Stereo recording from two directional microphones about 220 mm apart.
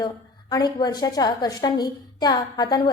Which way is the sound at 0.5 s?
20° left (ahead or behind).